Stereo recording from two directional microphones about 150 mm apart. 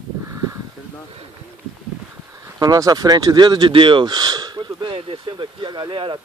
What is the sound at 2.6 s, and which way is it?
Speech, 25° right (ahead or behind).